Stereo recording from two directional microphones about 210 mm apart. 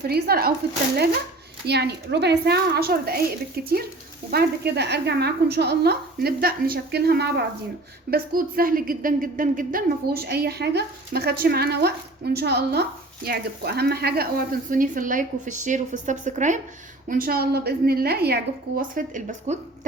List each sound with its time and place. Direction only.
0.1 s a woman's voice: 50° right (ahead or behind)
1.6 s a woman's voice: 50° right (ahead or behind)